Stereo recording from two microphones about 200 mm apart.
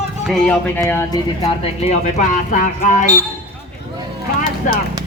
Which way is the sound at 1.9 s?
35° left (ahead or behind).